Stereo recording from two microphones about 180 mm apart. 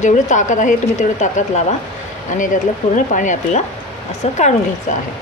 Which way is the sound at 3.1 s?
45° left (ahead or behind).